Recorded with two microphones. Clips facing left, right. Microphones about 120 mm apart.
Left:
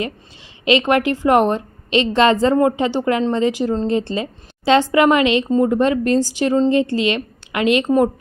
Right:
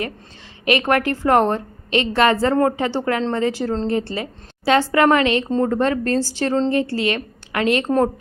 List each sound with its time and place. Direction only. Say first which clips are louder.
0.6 s a woman's voice: left 3 dB; 20° left (ahead or behind)